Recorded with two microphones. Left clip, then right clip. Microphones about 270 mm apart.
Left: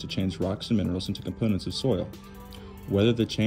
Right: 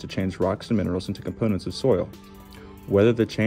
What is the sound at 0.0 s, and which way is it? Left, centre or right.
Speech, centre.